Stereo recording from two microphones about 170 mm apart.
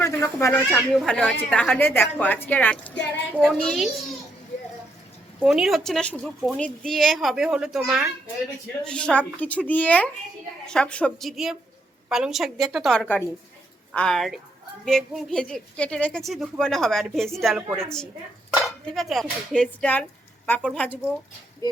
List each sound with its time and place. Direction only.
0.0 s a woman's voice: 15° left (ahead or behind); by 3.8 s centre (ahead or behind)
5.4 s a woman's voice: 5° right (ahead or behind)
18.9 s a woman's voice: centre (ahead or behind)
21.6 s a sound: 20° left (ahead or behind)